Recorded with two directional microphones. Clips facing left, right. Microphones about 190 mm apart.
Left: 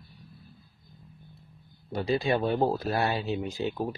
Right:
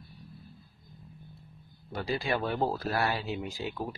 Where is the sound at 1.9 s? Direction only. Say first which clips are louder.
Left 5 dB; 20° left (ahead or behind).